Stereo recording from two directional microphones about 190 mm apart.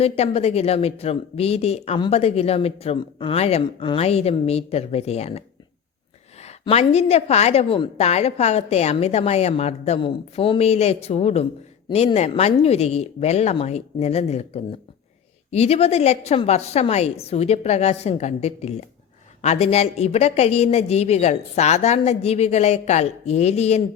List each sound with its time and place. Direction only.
0.0 s speech: 30° left (ahead or behind)
6.4 s speech: 35° left (ahead or behind)